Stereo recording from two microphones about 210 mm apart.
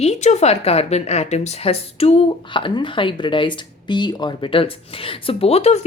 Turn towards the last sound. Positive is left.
turn(degrees=30)  # may be behind; listen again after turning